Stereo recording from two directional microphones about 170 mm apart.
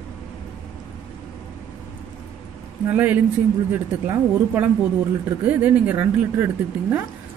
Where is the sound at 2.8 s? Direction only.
10° right (ahead or behind).